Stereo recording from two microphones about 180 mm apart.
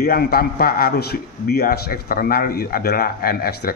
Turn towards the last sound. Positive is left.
turn(degrees=55)  # may be behind; listen again after turning